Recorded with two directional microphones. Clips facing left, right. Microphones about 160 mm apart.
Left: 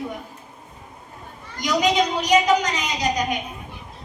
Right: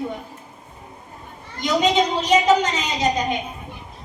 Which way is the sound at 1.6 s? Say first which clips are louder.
Right 1 dB; 25° right (ahead or behind).